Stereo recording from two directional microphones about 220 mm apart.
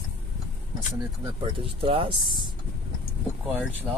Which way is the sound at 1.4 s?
25° right (ahead or behind).